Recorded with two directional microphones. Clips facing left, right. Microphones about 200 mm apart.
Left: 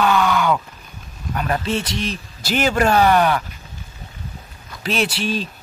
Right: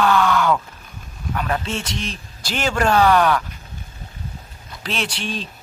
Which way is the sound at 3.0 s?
20° left (ahead or behind).